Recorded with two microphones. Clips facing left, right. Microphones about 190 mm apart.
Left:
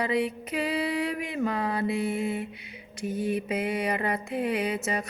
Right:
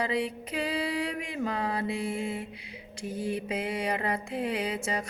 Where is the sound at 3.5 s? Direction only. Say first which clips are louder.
Left 3 dB; 5° left (ahead or behind).